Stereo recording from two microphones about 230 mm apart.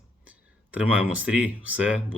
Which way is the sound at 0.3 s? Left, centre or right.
Centre.